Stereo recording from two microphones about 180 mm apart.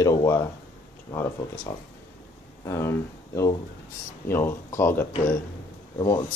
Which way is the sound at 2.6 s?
15° left (ahead or behind).